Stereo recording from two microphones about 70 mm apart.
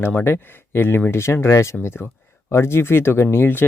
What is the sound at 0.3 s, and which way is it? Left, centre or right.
Speech, left.